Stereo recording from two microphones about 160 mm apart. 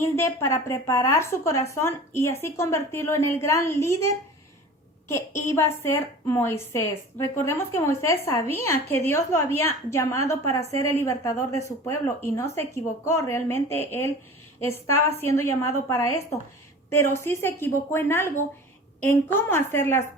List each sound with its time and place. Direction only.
0.0 s a woman's voice: 15° left (ahead or behind)